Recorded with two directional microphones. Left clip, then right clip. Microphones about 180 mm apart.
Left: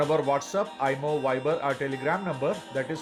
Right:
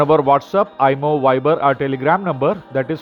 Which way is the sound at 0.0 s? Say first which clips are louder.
Right 11 dB; 40° right (ahead or behind).